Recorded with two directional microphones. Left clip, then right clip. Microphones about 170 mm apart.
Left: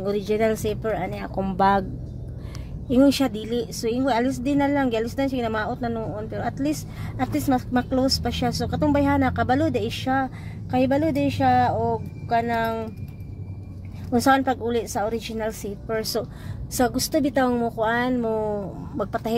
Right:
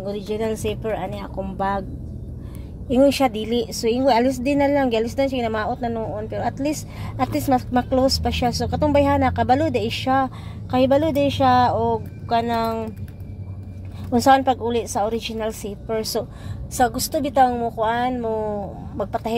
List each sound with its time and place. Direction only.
0.0 s a woman's voice: 35° left (ahead or behind)
1.4 s speech: 60° left (ahead or behind)
2.9 s a woman's voice: 5° left (ahead or behind)
14.1 s a woman's voice: 10° left (ahead or behind)